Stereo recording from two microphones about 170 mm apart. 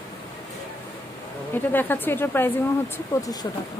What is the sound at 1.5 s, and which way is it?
Speech, 10° left (ahead or behind).